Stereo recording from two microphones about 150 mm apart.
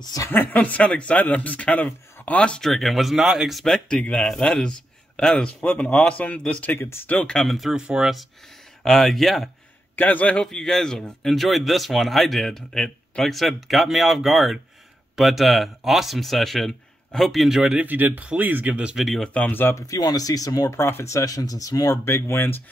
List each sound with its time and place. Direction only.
0.0 s a woman's voice: 25° left (ahead or behind)
0.3 s speech: 10° left (ahead or behind)